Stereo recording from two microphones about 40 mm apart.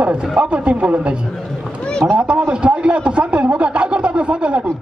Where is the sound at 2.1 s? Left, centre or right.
Right.